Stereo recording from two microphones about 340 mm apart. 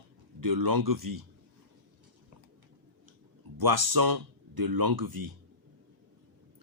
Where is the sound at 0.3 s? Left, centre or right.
Right.